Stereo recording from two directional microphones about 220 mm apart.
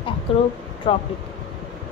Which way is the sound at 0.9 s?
25° left (ahead or behind).